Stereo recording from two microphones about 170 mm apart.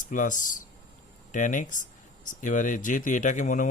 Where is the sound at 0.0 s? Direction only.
50° left (ahead or behind).